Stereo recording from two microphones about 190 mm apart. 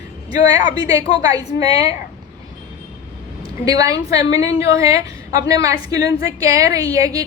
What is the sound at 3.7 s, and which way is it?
A woman's voice, 20° right (ahead or behind).